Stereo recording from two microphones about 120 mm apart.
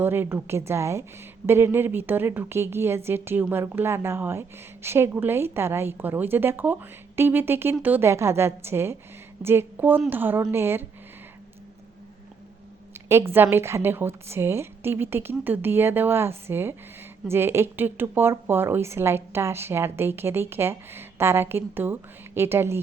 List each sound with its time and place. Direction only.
0.0 s a woman's voice: 20° right (ahead or behind)
12.9 s a woman's voice: 20° right (ahead or behind)